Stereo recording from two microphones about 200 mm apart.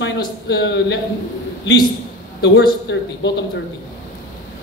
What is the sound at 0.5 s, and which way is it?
Speech, 60° left (ahead or behind).